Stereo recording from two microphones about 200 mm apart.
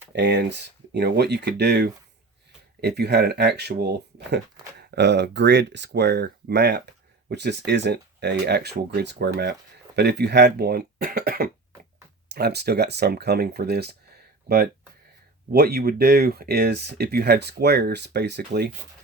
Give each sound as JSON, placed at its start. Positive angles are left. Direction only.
{"t": 0.1, "sound": "speech", "side_deg": -55}